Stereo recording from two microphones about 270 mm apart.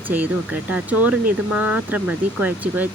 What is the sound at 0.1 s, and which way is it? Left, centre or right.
Speech, centre.